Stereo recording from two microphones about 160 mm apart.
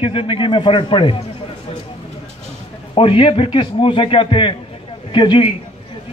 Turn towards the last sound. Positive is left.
turn(degrees=30)  # may be behind; listen again after turning